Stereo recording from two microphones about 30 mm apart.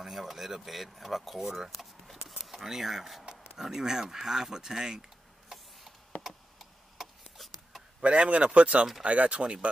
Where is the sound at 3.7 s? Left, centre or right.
Centre.